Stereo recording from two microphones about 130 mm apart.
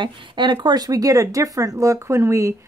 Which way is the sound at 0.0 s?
40° right (ahead or behind).